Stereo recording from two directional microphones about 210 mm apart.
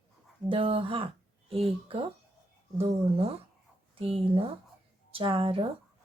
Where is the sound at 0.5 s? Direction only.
25° right (ahead or behind).